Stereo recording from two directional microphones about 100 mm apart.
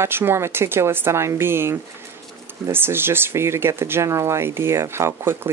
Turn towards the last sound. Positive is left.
turn(degrees=-25)  # may be behind; listen again after turning